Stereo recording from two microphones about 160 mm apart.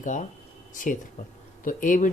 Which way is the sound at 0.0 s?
50° left (ahead or behind).